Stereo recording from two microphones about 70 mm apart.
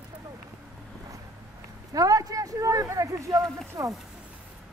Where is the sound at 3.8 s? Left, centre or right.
Right.